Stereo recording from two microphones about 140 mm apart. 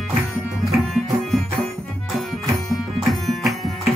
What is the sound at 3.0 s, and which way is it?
Music, centre (ahead or behind).